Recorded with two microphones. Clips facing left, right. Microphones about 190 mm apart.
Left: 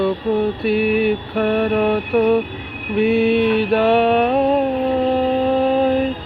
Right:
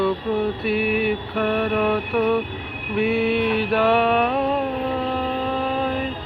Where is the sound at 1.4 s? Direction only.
30° left (ahead or behind).